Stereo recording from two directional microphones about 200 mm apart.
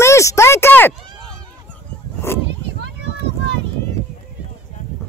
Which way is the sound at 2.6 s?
60° right (ahead or behind).